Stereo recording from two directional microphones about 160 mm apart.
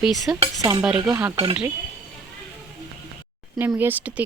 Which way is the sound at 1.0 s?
20° right (ahead or behind).